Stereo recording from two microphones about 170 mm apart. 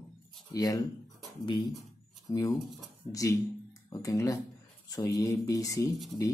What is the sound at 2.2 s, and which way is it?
Speech, 20° left (ahead or behind).